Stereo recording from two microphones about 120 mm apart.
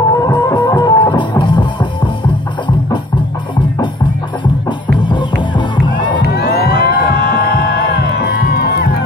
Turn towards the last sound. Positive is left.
turn(degrees=-45)  # may be behind; listen again after turning